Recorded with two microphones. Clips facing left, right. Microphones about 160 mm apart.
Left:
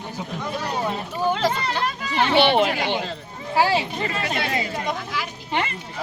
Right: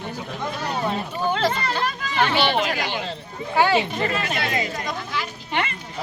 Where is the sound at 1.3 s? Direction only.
10° left (ahead or behind).